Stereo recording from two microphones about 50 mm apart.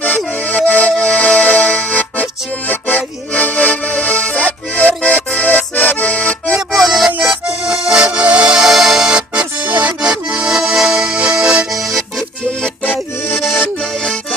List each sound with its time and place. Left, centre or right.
0.4 s accordion: left
0.9 s music: left
2.6 s accordion: left
6.7 s music: centre
7.4 s accordion: centre
8.5 s music: centre
9.1 s accordion: right
9.6 s accordion: right
10.0 s accordion: centre
11.7 s accordion: centre